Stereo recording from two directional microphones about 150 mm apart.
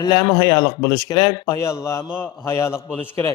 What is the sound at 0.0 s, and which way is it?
A man's voice, 30° left (ahead or behind).